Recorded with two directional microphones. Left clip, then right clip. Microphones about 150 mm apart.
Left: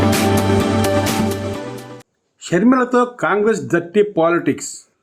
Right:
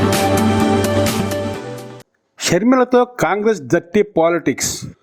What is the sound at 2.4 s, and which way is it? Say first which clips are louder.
A man's voice: right 1 dB; 45° right (ahead or behind).